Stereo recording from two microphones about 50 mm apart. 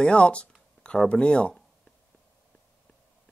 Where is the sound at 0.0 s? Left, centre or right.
Left.